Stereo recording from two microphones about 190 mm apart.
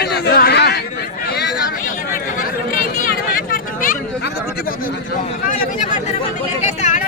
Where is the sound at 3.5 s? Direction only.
45° left (ahead or behind).